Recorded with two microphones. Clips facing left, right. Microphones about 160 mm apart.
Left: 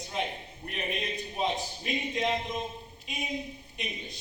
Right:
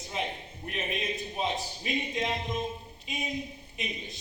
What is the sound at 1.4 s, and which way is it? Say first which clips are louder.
A man's voice: left 3 dB; centre (ahead or behind).